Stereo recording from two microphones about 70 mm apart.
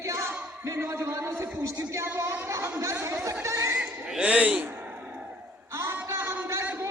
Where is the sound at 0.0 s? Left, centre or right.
Right.